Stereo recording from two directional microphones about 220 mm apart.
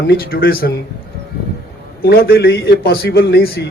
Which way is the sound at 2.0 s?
45° left (ahead or behind).